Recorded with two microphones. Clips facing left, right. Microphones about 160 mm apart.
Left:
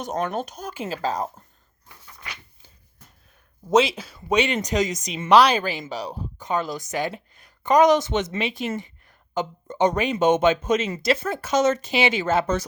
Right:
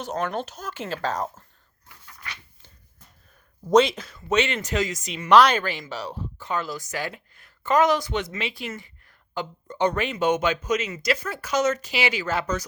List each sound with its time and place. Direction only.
0.4 s speech: 15° left (ahead or behind)
3.7 s speech: 5° left (ahead or behind); by 12.6 s 25° left (ahead or behind)